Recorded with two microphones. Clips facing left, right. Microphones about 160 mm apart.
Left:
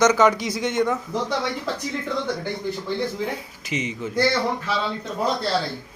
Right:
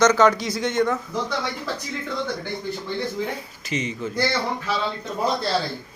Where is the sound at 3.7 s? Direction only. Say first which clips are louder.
Even; 15° left (ahead or behind).